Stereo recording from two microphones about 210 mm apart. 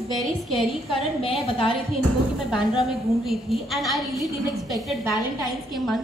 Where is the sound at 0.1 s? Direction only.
Centre (ahead or behind).